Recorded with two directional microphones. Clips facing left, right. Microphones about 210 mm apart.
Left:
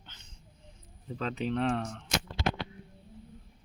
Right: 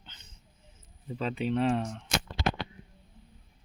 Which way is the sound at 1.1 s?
5° right (ahead or behind).